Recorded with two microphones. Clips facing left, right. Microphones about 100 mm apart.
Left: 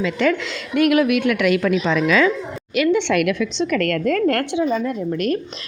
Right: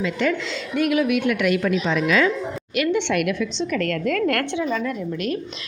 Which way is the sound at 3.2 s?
90° left.